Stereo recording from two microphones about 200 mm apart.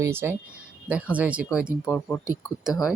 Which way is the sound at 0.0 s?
10° right (ahead or behind).